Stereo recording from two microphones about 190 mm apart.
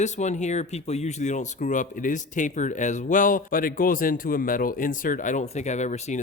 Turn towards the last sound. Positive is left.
turn(degrees=35)  # may be behind; listen again after turning